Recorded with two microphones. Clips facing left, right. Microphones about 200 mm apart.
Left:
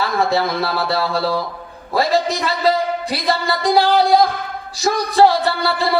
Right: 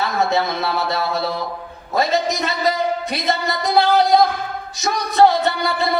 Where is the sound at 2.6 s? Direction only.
30° left (ahead or behind).